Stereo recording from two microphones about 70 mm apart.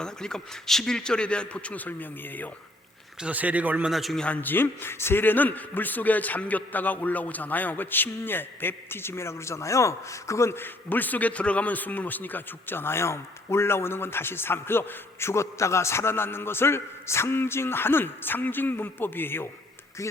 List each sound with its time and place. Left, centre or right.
0.0 s a man's voice: centre; by 2.5 s left
3.2 s speech: centre
3.8 s a man's voice: centre
4.2 s a man's voice: left